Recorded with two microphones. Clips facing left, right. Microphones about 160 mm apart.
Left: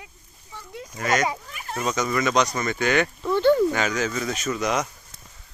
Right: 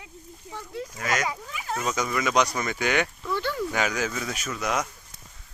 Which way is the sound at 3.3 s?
25° left (ahead or behind).